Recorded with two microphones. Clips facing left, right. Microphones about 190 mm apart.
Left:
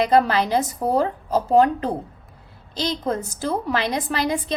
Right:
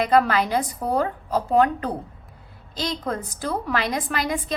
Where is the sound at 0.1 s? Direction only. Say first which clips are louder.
Left 1 dB; 30° left (ahead or behind).